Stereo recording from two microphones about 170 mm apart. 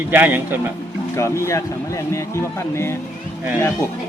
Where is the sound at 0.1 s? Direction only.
10° right (ahead or behind).